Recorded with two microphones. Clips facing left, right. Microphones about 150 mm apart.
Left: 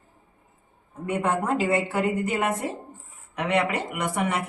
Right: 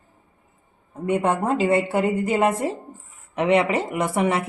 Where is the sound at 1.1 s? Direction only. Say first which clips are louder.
Right 3 dB; 25° right (ahead or behind).